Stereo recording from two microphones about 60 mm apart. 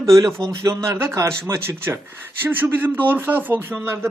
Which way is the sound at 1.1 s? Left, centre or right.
Right.